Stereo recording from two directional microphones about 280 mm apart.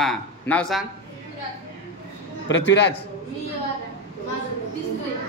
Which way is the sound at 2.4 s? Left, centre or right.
Left.